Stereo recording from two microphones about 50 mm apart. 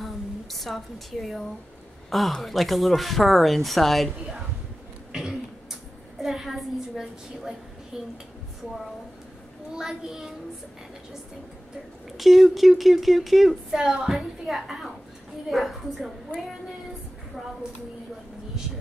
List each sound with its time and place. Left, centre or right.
0.0 s a sound: centre
2.0 s speech: centre
5.1 s cough: centre
6.2 s a woman's voice: centre
9.8 s a woman's voice: centre
12.2 s speech: centre